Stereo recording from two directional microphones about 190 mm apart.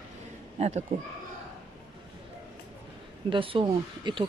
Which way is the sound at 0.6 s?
35° right (ahead or behind).